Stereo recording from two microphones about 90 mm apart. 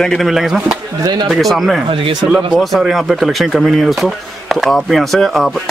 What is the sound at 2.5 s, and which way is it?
Speech, 5° right (ahead or behind).